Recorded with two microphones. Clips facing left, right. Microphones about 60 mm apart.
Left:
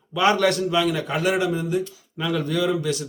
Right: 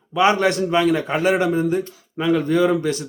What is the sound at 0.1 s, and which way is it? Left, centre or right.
A man's voice, right.